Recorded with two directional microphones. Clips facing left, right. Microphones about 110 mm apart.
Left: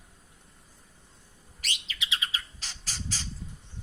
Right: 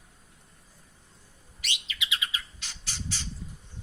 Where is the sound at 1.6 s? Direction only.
35° left (ahead or behind).